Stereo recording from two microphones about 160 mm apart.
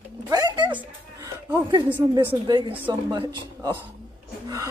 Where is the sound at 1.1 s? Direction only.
25° right (ahead or behind).